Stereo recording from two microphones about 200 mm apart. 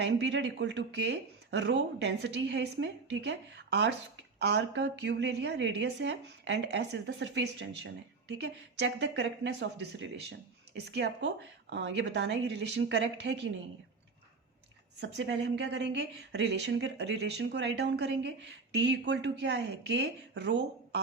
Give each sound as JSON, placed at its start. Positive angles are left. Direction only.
{"t": 0.0, "sound": "speech", "side_deg": -60}
{"t": 15.0, "sound": "speech", "side_deg": -60}